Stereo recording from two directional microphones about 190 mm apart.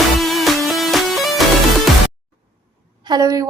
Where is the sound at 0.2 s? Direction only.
Centre (ahead or behind).